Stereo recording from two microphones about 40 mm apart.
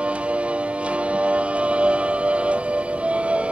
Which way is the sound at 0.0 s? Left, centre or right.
Right.